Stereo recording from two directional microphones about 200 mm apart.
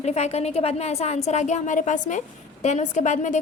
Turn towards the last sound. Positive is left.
turn(degrees=35)  # may be behind; listen again after turning